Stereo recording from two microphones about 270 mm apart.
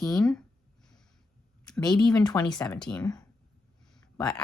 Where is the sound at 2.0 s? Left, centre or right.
Centre.